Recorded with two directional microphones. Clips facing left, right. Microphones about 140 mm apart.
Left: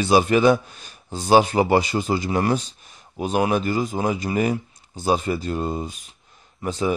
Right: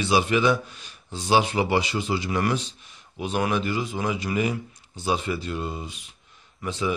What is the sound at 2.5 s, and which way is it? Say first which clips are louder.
A man's voice: left 4 dB; 45° left (ahead or behind).